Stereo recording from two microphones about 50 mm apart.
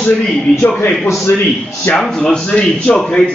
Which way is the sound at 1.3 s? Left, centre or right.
Left.